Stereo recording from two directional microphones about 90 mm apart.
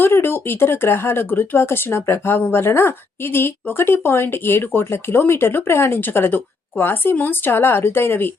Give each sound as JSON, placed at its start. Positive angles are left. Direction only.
{"t": 0.0, "sound": "speech", "side_deg": 25}